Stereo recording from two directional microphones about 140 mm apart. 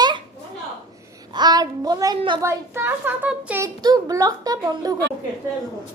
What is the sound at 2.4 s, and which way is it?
A child's voice, 15° right (ahead or behind).